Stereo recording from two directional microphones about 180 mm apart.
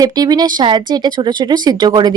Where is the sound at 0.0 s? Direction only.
20° right (ahead or behind).